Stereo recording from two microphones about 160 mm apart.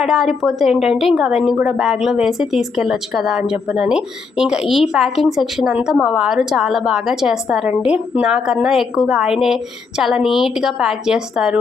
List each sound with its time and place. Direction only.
0.0 s a woman's voice: centre (ahead or behind)